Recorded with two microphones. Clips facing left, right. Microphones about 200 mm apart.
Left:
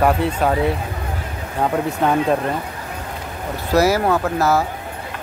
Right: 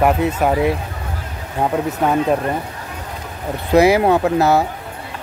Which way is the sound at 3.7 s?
15° right (ahead or behind).